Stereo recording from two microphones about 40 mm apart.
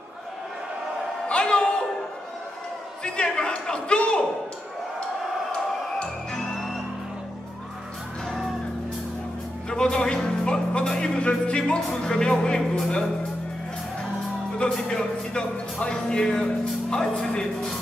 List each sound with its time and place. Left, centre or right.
1.2 s a sound: left
3.0 s speech: left
9.7 s music: centre
11.1 s speech: left
14.8 s a man's voice: centre